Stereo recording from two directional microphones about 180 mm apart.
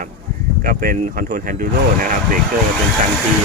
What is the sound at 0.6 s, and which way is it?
Speech, 55° right (ahead or behind).